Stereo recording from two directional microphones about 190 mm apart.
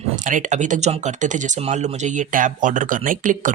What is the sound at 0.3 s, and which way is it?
Speech, 40° right (ahead or behind).